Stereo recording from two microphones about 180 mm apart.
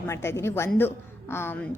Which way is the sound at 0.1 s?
15° left (ahead or behind).